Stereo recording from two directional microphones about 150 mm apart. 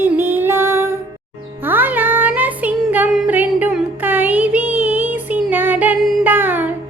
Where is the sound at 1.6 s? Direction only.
10° right (ahead or behind).